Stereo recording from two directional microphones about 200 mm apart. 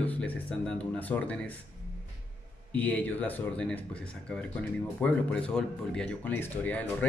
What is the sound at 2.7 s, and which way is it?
Speech, 5° left (ahead or behind).